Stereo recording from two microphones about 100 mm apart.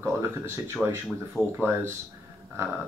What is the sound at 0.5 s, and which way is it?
Speech, 20° right (ahead or behind).